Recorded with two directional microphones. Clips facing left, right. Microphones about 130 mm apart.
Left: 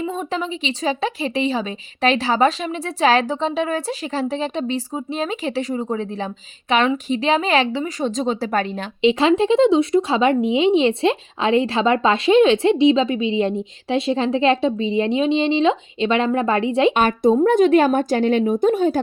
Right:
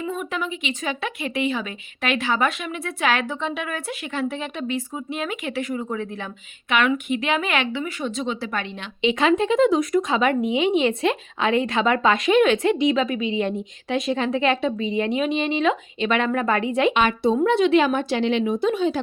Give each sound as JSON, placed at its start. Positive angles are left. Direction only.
{"t": 0.0, "sound": "speech", "side_deg": 30}
{"t": 9.0, "sound": "speech", "side_deg": 30}
{"t": 16.9, "sound": "speech", "side_deg": 45}